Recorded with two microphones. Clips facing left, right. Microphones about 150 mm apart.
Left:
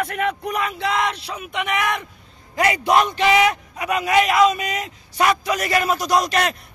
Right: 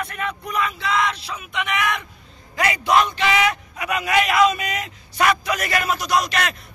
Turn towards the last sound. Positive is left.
turn(degrees=40)  # may be behind; listen again after turning